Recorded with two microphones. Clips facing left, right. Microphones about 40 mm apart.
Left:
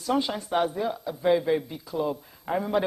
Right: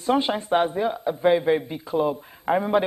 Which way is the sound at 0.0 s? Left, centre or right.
Right.